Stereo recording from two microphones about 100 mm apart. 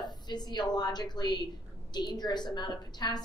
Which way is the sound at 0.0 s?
45° left (ahead or behind).